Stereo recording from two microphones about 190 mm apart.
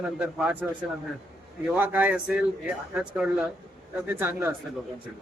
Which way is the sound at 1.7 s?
10° right (ahead or behind).